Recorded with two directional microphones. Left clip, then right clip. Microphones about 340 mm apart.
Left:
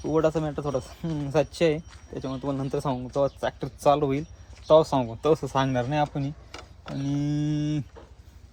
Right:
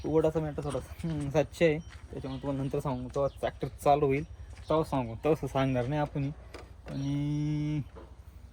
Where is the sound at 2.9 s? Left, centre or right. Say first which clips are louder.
Left 7 dB; left.